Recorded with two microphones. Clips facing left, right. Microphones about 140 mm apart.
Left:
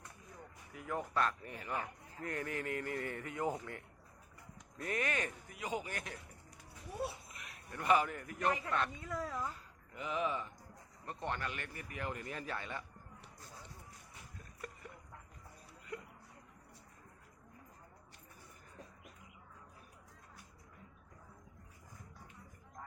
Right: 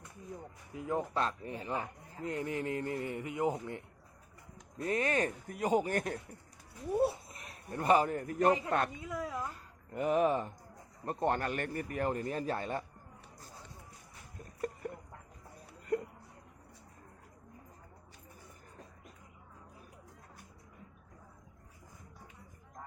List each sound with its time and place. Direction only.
0.7 s speech: 25° right (ahead or behind)
9.0 s a woman's voice: 10° right (ahead or behind)
9.9 s speech: 50° right (ahead or behind)
14.8 s a sound: 55° right (ahead or behind)